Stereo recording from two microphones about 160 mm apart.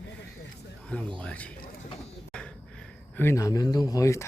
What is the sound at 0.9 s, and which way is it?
Speech, 5° left (ahead or behind).